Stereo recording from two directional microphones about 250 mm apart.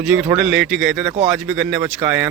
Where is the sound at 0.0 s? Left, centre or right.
Centre.